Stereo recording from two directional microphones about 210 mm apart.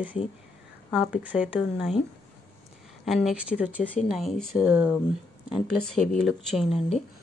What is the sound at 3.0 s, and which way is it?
Speech, centre (ahead or behind).